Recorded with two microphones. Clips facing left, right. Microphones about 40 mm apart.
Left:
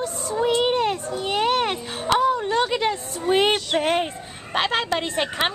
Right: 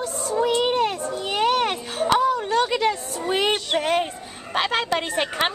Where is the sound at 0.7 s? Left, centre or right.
Left.